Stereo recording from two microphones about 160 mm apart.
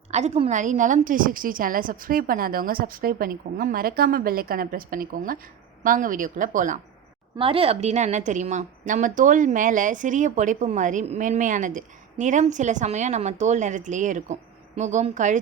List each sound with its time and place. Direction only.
0.1 s a woman's voice: 45° right (ahead or behind)
7.3 s a woman's voice: 35° right (ahead or behind)